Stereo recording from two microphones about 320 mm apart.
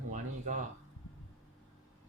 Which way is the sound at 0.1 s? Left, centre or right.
Right.